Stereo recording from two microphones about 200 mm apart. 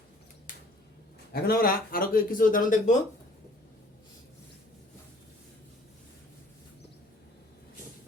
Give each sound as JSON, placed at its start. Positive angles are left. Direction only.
{"t": 1.3, "sound": "a man's voice", "side_deg": 50}